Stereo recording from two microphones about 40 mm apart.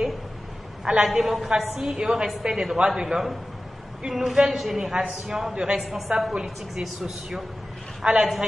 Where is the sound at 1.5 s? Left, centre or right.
Centre.